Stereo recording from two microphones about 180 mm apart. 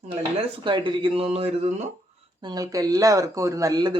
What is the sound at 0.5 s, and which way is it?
Speech, 25° right (ahead or behind).